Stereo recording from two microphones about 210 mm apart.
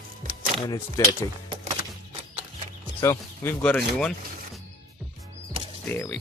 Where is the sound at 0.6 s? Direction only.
15° left (ahead or behind).